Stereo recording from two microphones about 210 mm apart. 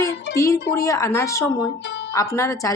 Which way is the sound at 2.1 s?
15° left (ahead or behind).